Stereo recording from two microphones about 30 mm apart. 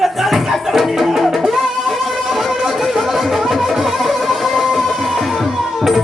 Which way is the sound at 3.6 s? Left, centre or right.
Centre.